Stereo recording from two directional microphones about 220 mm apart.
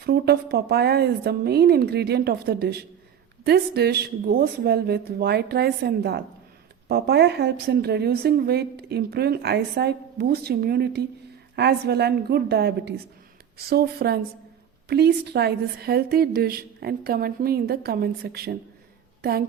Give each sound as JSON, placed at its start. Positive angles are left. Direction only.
{"t": 0.0, "sound": "a woman's voice", "side_deg": -45}